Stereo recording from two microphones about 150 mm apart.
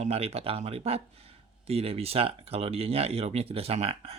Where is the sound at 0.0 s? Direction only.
45° right (ahead or behind).